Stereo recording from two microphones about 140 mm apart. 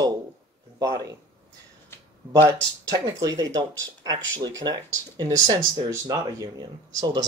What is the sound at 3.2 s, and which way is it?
Speech, 25° right (ahead or behind).